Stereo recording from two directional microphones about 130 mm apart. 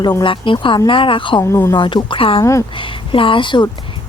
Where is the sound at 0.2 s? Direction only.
40° left (ahead or behind).